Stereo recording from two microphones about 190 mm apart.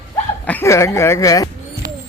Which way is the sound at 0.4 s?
10° left (ahead or behind).